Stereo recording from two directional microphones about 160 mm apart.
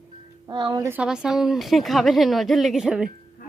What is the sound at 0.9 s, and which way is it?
A woman's voice, 5° right (ahead or behind).